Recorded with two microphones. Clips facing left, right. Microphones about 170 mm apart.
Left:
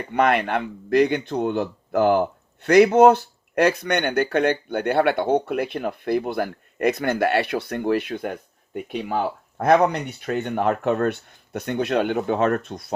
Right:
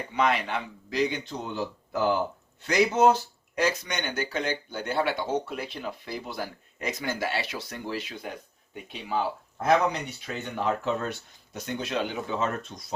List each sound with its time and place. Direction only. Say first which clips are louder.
0.1 s speech: left 6 dB; 55° left (ahead or behind)